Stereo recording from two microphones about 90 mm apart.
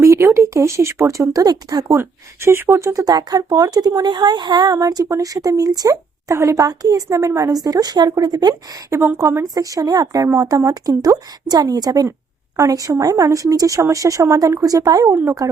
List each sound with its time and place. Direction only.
0.0 s speech: 30° right (ahead or behind)
2.0 s speech: 25° right (ahead or behind); by 8.8 s 50° right (ahead or behind)
8.9 s speech: 30° right (ahead or behind)
10.2 s speech: 30° right (ahead or behind)
10.6 s speech: 40° right (ahead or behind)
15.1 s speech: 25° right (ahead or behind)